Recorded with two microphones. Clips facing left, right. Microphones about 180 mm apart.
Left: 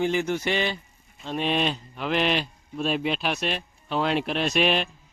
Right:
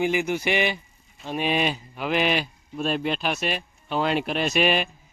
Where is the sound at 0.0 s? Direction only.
10° right (ahead or behind).